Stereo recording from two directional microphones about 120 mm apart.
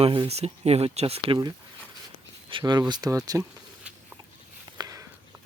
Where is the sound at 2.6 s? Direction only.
35° right (ahead or behind).